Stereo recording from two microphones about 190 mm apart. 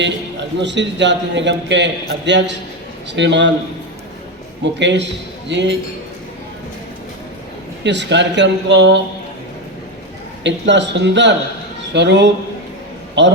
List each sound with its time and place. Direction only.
0.6 s a man's voice: 70° right (ahead or behind)
4.6 s a man's voice: 70° right (ahead or behind)
7.9 s a man's voice: 70° right (ahead or behind)
10.4 s a man's voice: 70° right (ahead or behind)